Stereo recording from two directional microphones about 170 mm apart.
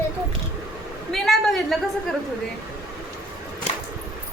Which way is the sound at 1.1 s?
Centre (ahead or behind).